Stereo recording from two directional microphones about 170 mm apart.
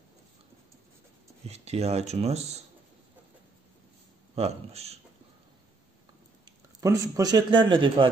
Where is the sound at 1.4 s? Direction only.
40° right (ahead or behind).